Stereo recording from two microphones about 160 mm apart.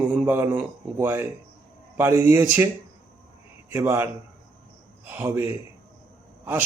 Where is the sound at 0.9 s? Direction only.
15° right (ahead or behind).